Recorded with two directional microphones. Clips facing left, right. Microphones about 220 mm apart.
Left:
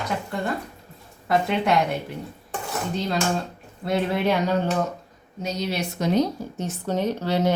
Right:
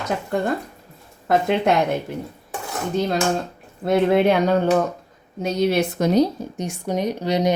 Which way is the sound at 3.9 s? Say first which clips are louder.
Right 6 dB; 55° right (ahead or behind).